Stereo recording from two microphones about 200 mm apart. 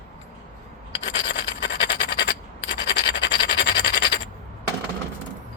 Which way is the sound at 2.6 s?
65° left (ahead or behind).